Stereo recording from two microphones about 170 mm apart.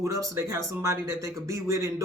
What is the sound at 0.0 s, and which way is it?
Speech, 15° right (ahead or behind).